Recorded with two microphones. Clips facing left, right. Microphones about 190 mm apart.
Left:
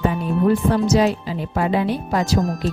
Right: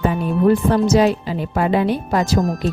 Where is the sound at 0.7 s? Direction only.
55° right (ahead or behind).